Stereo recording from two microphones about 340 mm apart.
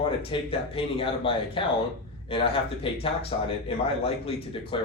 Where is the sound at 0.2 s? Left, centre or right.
Centre.